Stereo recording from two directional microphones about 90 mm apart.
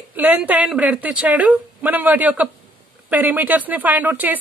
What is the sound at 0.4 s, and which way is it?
A woman's voice, 10° right (ahead or behind).